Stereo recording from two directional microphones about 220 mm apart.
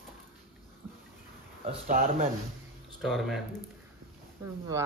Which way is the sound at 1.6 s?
40° right (ahead or behind).